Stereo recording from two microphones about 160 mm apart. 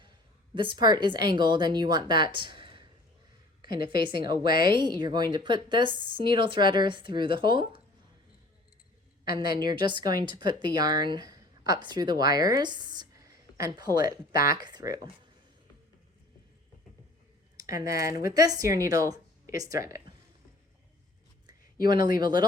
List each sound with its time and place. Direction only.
0.5 s a woman's voice: 30° right (ahead or behind)
9.2 s a woman's voice: 75° left (ahead or behind)
9.5 s a woman's voice: 25° right (ahead or behind)
17.7 s a woman's voice: 20° right (ahead or behind)
21.8 s a woman's voice: 25° right (ahead or behind)